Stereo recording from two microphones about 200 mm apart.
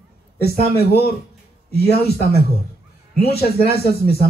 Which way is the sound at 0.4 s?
50° left (ahead or behind).